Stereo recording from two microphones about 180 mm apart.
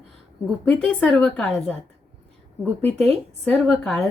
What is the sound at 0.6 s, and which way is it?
A woman's voice, 5° left (ahead or behind).